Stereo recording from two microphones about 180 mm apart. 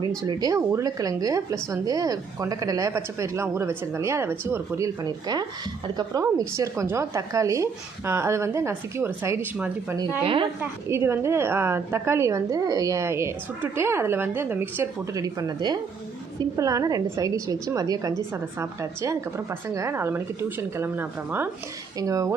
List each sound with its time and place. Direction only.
0.2 s a woman's voice: 20° right (ahead or behind)
10.2 s a woman's voice: 30° right (ahead or behind)
10.6 s a woman's voice: 15° right (ahead or behind)